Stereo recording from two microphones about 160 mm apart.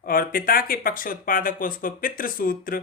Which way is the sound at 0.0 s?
65° left (ahead or behind).